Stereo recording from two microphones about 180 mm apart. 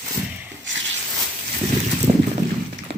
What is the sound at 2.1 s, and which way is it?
Boat, 25° right (ahead or behind).